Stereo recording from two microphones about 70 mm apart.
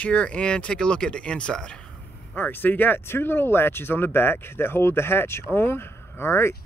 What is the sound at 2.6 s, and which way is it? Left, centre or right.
Speech, left.